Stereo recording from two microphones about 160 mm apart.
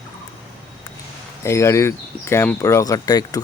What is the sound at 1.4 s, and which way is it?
Speech, 15° left (ahead or behind).